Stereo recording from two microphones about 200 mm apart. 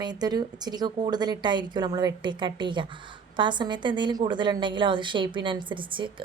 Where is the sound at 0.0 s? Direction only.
20° right (ahead or behind).